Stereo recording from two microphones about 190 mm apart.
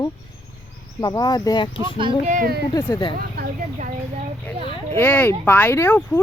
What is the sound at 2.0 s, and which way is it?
Speech, 25° right (ahead or behind).